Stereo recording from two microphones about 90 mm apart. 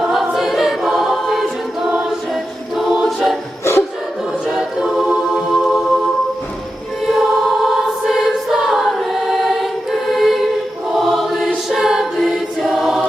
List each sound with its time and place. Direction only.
0.1 s choir: 5° right (ahead or behind)
3.6 s music: 30° left (ahead or behind)
4.5 s a capella: 5° right (ahead or behind)
7.1 s choir: centre (ahead or behind)
10.1 s a capella: centre (ahead or behind)
10.9 s choir: centre (ahead or behind)